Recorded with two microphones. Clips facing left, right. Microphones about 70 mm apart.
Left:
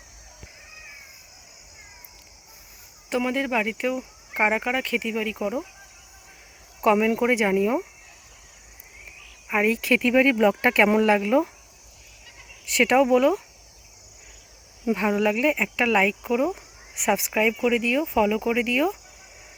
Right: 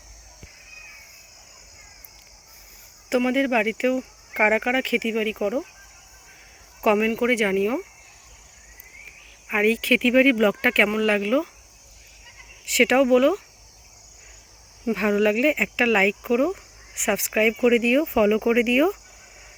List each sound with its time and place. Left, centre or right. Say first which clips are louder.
3.1 s speech: right 4 dB; centre
6.8 s speech: even; centre
9.5 s speech: right 1 dB; centre
11.0 s speech: left 1 dB; centre
12.6 s speech: right 1 dB; centre
14.8 s speech: right 2 dB; centre